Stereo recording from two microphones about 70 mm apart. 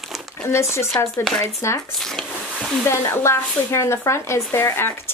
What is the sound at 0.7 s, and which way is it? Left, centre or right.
A woman's voice, left.